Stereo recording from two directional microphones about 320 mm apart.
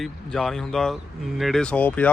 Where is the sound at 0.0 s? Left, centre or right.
Centre.